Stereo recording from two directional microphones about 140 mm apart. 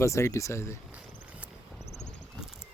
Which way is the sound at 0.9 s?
10° right (ahead or behind).